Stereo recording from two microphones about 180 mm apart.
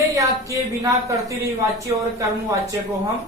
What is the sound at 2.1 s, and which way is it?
Speech, 20° right (ahead or behind).